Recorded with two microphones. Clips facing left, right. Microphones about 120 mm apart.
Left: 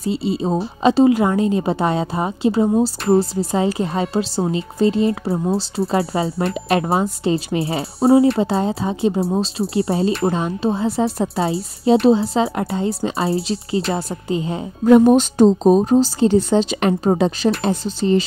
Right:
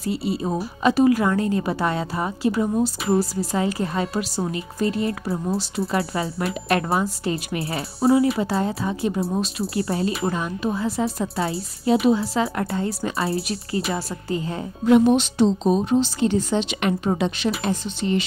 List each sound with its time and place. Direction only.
0.0 s a woman's voice: 25° left (ahead or behind)
14.9 s a woman's voice: 40° left (ahead or behind)